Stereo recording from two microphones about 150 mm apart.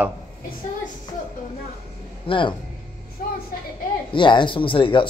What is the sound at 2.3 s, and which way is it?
Speech, 35° left (ahead or behind).